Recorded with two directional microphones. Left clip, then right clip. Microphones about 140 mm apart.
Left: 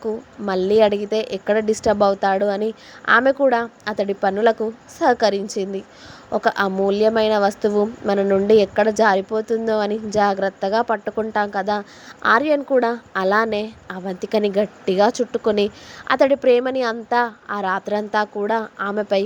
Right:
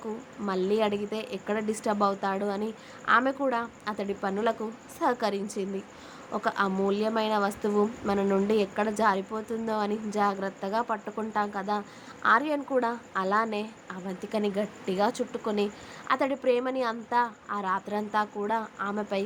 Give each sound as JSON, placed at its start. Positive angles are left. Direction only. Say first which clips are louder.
{"t": 0.0, "sound": "a woman's voice", "louder": "left 10 dB", "side_deg": 50}